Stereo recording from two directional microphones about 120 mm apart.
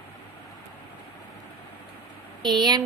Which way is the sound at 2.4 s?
35° right (ahead or behind).